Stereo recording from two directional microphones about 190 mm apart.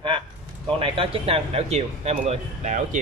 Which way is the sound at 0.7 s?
30° right (ahead or behind).